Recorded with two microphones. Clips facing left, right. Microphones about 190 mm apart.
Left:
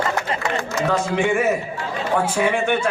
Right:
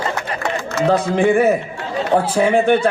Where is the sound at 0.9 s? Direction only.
35° right (ahead or behind).